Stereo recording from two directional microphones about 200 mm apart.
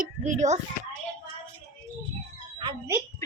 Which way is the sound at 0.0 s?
40° right (ahead or behind).